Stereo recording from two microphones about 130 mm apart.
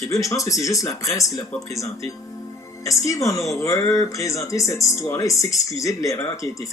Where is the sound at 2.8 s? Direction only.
25° left (ahead or behind).